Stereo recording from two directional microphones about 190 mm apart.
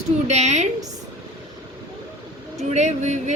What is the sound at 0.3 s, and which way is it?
Speech, 35° right (ahead or behind).